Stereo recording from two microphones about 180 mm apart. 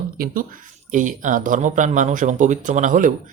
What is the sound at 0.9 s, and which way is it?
A man's voice, 45° right (ahead or behind).